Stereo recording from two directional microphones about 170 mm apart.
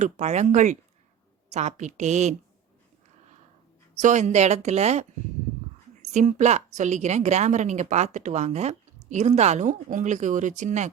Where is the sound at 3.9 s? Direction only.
45° right (ahead or behind).